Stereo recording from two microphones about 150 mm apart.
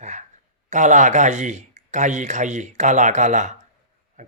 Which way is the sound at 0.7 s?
55° right (ahead or behind).